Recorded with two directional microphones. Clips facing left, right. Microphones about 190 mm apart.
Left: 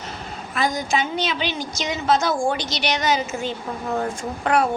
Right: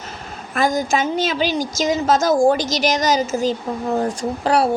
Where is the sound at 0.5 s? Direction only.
45° right (ahead or behind).